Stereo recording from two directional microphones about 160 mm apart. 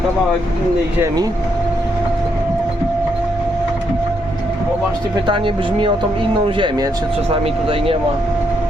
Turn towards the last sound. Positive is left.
turn(degrees=-35)  # may be behind; listen again after turning